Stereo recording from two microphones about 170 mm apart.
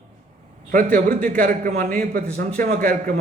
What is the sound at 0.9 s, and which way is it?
Speech, 60° right (ahead or behind).